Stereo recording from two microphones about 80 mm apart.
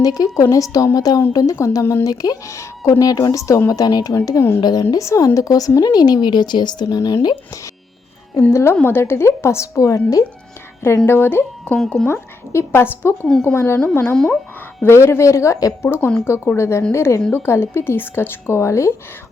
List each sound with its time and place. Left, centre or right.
0.0 s a woman's voice: left
2.0 s speech: left
3.0 s speech: left
4.1 s a woman's voice: left
4.6 s speech: left
6.9 s speech: left
8.4 s a woman's voice: left
11.0 s a woman's voice: left